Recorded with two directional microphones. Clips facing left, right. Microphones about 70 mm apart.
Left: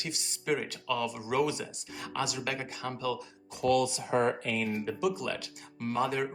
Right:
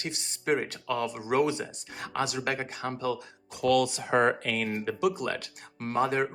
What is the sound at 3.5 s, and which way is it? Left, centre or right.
Speech, right.